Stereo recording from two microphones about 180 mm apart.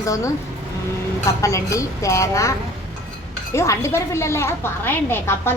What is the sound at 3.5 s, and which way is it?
A woman's voice, 15° left (ahead or behind).